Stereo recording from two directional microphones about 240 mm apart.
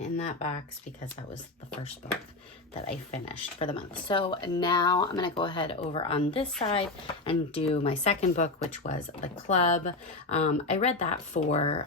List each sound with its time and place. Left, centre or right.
0.0 s speech: left
2.8 s speech: left